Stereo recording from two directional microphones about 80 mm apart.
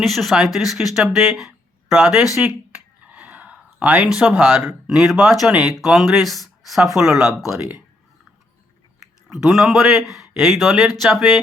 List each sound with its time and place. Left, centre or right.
0.0 s speech: centre
2.5 s a sound: centre
5.5 s speech: centre
7.6 s speech: right
9.3 s speech: centre